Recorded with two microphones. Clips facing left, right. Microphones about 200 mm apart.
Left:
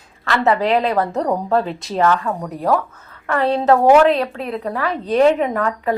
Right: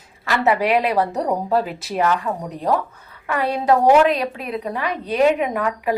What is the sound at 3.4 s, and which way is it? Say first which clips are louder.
Speech: left 4 dB; 10° right (ahead or behind).